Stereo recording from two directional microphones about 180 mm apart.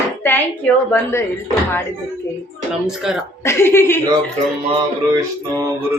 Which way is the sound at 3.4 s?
15° left (ahead or behind).